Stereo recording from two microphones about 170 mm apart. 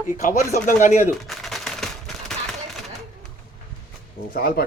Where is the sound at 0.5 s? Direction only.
50° left (ahead or behind).